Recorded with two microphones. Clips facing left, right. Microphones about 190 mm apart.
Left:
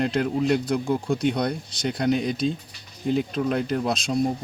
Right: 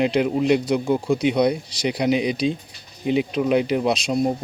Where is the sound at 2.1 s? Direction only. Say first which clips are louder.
Right 2 dB; 75° right (ahead or behind).